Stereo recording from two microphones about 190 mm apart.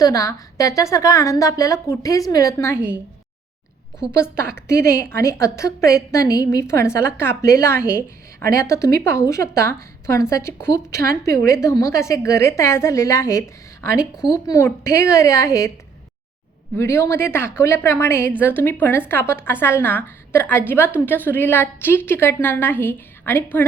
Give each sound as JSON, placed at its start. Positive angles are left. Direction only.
{"t": 0.0, "sound": "a woman's voice", "side_deg": 15}
{"t": 4.1, "sound": "a woman's voice", "side_deg": 15}
{"t": 16.7, "sound": "a woman's voice", "side_deg": 15}